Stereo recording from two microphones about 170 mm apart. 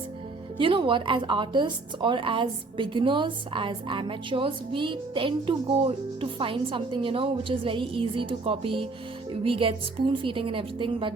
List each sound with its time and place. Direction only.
0.6 s a woman's voice: 30° right (ahead or behind)